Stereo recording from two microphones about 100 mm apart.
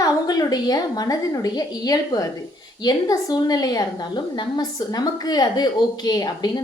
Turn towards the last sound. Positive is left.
turn(degrees=45)  # may be behind; listen again after turning